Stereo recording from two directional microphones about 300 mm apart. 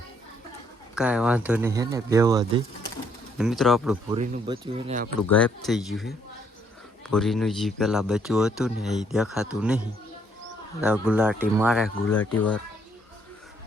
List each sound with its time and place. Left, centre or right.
0.9 s a man's voice: centre
4.1 s speech: centre
5.3 s a man's voice: centre
10.8 s a man's voice: centre